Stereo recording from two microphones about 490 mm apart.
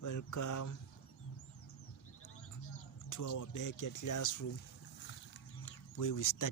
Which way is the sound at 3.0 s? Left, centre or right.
Left.